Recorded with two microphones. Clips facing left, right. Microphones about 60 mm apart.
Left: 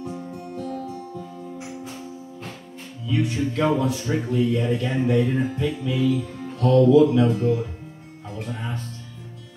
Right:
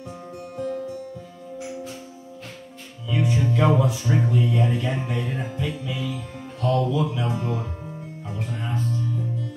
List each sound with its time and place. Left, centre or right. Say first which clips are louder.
0.6 s music: right 3 dB; centre
3.1 s speech: even; centre
3.7 s music: right 1 dB; centre
6.1 s speech: left 6 dB; centre
7.2 s speech: left 6 dB; centre
8.4 s music: right 2 dB; centre